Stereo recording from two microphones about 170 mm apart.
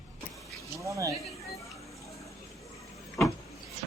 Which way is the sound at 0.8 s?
20° right (ahead or behind).